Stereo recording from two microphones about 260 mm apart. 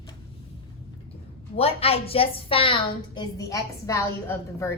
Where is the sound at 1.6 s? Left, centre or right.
Left.